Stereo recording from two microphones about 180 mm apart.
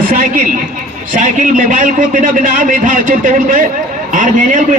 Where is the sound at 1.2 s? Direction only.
45° right (ahead or behind).